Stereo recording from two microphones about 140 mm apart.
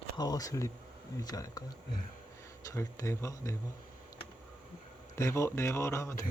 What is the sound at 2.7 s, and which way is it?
Speech, 20° left (ahead or behind).